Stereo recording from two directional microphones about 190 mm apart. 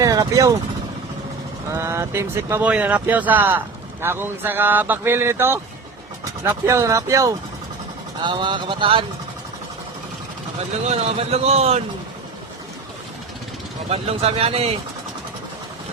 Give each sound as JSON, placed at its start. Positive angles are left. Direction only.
{"t": 0.0, "sound": "speech", "side_deg": -20}
{"t": 1.7, "sound": "speech", "side_deg": -15}
{"t": 10.8, "sound": "a man's voice", "side_deg": -30}
{"t": 13.9, "sound": "a man's voice", "side_deg": -30}